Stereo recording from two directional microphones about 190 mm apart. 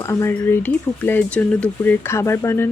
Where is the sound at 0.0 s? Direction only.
15° left (ahead or behind).